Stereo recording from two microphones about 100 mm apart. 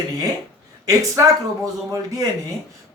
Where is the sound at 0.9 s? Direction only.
35° right (ahead or behind).